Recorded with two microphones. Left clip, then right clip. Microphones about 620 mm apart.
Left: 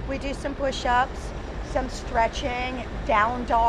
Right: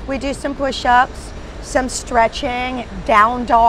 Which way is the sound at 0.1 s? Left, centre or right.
Right.